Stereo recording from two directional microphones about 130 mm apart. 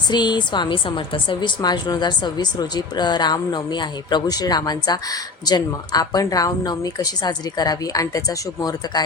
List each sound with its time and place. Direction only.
0.1 s a woman's voice: 35° left (ahead or behind)